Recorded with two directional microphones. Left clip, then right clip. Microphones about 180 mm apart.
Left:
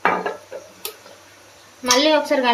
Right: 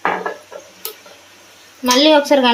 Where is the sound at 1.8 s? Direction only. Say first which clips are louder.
Right 5 dB; 35° right (ahead or behind).